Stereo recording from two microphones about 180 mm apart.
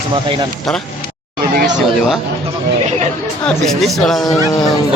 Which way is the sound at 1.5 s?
60° right (ahead or behind).